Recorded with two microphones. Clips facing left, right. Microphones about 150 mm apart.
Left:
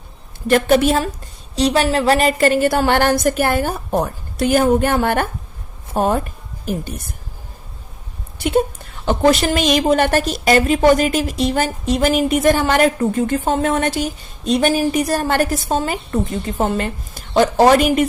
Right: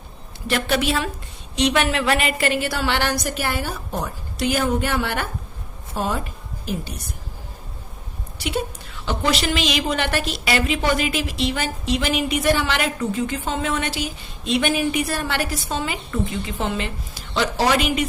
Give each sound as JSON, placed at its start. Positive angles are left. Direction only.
{"t": 0.4, "sound": "a woman's voice", "side_deg": 45}
{"t": 8.4, "sound": "a woman's voice", "side_deg": 50}